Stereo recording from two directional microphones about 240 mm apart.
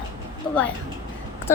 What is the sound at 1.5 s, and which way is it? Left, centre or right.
Speech, centre.